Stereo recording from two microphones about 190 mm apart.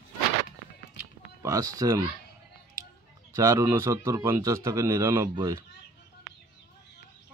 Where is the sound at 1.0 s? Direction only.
15° right (ahead or behind).